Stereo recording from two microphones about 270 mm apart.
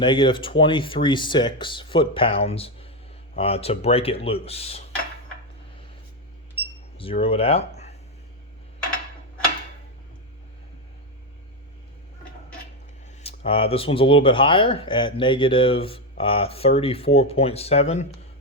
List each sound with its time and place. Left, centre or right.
0.0 s speech: centre
7.0 s speech: left
13.2 s speech: left